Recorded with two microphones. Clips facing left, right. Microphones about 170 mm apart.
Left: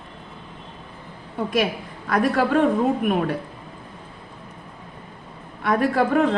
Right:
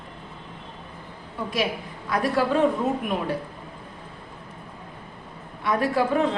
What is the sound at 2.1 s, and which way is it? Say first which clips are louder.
Speech: left 3 dB; 60° left (ahead or behind).